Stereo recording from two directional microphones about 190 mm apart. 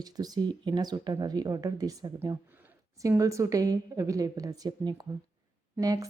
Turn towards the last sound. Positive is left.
turn(degrees=-20)  # may be behind; listen again after turning